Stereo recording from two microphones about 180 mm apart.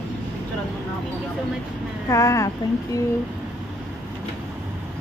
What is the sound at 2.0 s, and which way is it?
Speech, 15° left (ahead or behind).